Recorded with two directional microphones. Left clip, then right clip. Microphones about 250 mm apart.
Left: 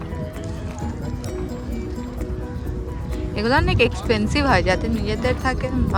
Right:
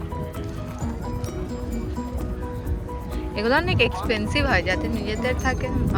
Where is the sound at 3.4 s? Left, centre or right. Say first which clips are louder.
Left 2 dB; centre.